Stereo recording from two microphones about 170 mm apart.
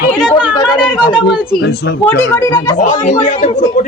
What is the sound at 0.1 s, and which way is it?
Chatter, 5° right (ahead or behind).